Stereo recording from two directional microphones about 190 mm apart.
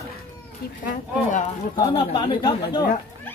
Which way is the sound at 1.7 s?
20° left (ahead or behind).